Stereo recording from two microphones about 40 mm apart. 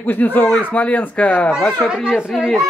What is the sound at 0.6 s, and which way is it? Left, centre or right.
Speech, left.